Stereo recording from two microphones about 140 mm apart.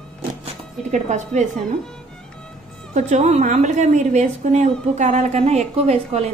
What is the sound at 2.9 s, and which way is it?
A woman's voice, 55° right (ahead or behind).